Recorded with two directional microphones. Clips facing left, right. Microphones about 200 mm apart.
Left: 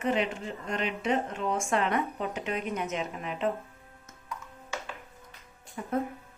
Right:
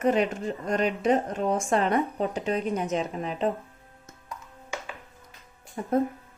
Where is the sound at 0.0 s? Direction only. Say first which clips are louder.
Right 5 dB; 45° right (ahead or behind).